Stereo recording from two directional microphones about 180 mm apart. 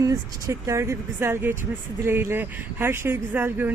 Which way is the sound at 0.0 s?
20° right (ahead or behind).